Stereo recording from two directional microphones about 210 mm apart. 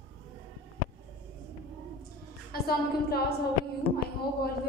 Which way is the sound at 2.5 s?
45° left (ahead or behind).